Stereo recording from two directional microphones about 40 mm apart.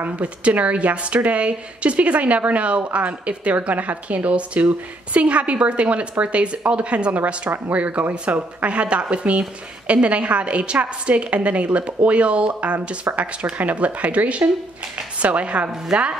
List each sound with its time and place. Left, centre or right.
0.1 s a woman's voice: right
15.9 s speech: centre